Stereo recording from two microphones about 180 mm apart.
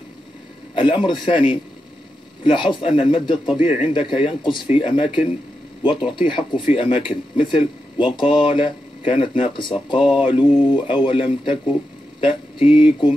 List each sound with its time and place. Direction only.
0.7 s speech: 30° left (ahead or behind)